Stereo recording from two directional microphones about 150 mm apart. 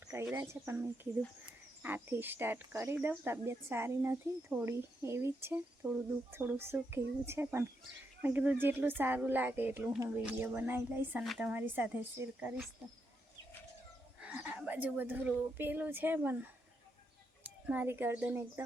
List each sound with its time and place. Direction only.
0.1 s speech: 15° right (ahead or behind)
14.2 s speech: 10° right (ahead or behind)
17.7 s speech: 15° right (ahead or behind)